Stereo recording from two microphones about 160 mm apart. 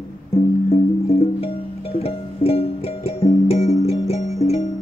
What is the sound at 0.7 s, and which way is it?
Music, 40° left (ahead or behind).